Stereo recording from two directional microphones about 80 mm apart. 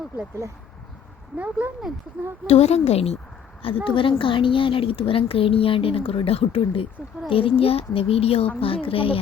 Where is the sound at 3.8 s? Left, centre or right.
Left.